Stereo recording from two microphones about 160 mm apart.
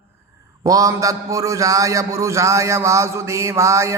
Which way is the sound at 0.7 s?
20° right (ahead or behind).